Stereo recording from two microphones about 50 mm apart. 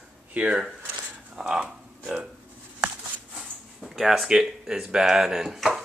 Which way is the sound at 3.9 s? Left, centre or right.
Centre.